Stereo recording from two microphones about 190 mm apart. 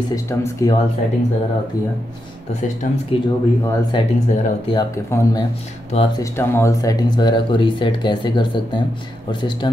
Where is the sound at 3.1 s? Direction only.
30° left (ahead or behind).